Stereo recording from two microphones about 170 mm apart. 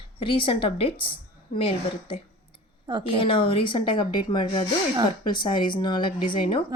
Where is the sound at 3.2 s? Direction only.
30° left (ahead or behind).